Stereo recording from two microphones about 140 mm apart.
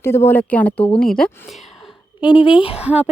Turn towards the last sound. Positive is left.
turn(degrees=-10)  # may be behind; listen again after turning